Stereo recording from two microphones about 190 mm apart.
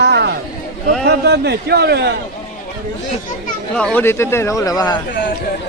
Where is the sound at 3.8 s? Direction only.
5° left (ahead or behind).